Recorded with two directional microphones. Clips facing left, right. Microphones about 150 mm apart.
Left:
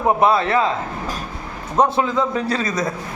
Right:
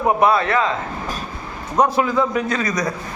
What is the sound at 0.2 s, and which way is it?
Speech, 25° left (ahead or behind).